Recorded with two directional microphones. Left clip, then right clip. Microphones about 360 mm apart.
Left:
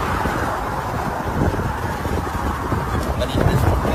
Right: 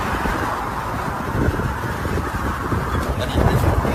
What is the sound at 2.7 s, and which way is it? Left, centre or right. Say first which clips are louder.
Vehicle: even; centre.